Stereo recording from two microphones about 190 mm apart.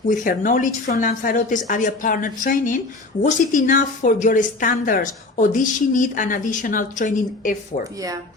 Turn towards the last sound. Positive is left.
turn(degrees=45)  # may be behind; listen again after turning